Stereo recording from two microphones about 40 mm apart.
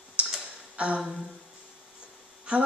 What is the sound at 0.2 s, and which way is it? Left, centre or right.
Tick-tock, right.